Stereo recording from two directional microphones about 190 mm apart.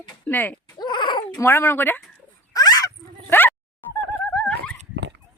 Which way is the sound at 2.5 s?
20° left (ahead or behind).